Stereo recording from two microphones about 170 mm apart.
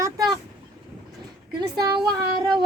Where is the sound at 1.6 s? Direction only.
25° right (ahead or behind).